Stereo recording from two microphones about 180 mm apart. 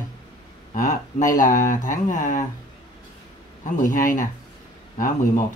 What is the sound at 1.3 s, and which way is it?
Speech, 45° left (ahead or behind).